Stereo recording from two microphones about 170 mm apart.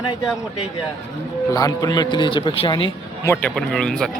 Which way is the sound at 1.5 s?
20° left (ahead or behind).